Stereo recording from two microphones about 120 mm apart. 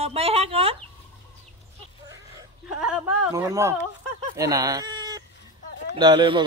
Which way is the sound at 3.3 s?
30° right (ahead or behind).